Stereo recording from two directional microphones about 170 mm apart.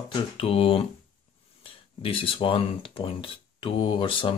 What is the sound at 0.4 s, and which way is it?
Speech, 35° left (ahead or behind).